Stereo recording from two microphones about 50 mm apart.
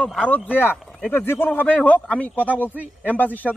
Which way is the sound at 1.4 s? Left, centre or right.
Left.